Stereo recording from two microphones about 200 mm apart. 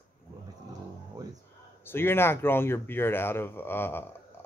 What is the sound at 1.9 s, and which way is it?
Speech, 10° left (ahead or behind).